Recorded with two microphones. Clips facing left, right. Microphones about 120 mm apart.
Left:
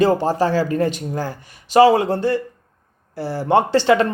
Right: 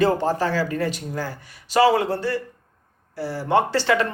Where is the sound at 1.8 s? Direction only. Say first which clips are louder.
Left 5 dB; 45° left (ahead or behind).